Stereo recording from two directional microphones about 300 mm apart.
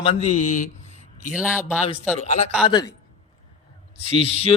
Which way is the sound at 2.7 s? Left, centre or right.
Centre.